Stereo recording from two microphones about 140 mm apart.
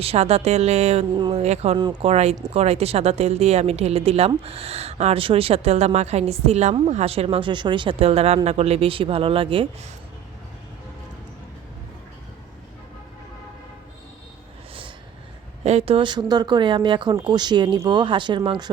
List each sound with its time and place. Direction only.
0.0 s a woman's voice: 45° right (ahead or behind)
1.1 s speech: 30° right (ahead or behind)
1.4 s a woman's voice: 50° right (ahead or behind)
1.7 s speech: 30° right (ahead or behind)
2.0 s a woman's voice: 50° right (ahead or behind)
15.6 s speech: 45° right (ahead or behind)